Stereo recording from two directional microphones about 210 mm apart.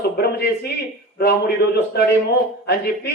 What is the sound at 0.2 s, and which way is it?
A man's voice, 50° left (ahead or behind).